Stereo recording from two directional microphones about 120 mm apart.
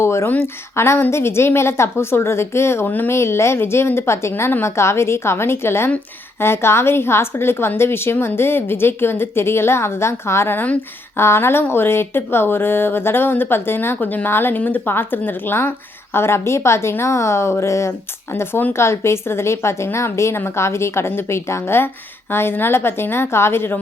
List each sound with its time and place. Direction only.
0.0 s a woman's voice: 25° left (ahead or behind)